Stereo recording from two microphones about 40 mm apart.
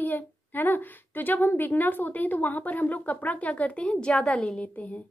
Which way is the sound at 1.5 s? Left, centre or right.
Left.